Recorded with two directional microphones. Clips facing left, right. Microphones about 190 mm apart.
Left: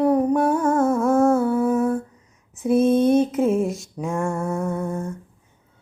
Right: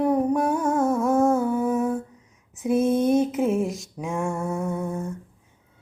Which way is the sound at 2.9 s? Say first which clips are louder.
Left 4 dB; 25° left (ahead or behind).